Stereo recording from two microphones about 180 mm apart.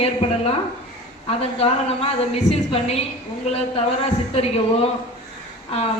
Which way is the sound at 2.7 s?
35° left (ahead or behind).